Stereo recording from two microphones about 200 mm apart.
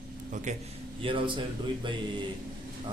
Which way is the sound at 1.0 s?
25° right (ahead or behind).